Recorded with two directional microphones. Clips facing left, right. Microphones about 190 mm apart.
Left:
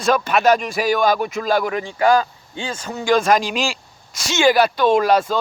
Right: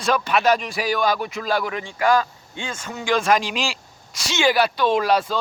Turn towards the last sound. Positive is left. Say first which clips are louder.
# left 4 dB
turn(degrees=45)  # may be behind; listen again after turning